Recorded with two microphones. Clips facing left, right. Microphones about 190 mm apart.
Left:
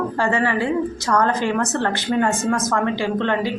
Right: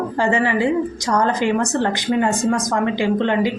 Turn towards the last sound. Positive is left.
turn(degrees=-15)  # may be behind; listen again after turning